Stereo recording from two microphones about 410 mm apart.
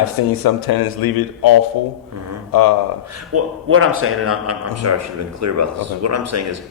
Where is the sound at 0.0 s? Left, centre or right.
Left.